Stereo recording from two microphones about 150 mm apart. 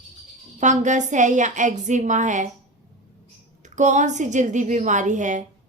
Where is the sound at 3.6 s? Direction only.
55° right (ahead or behind).